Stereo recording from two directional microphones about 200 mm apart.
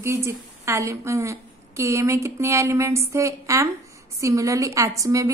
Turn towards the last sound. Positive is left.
turn(degrees=-15)  # may be behind; listen again after turning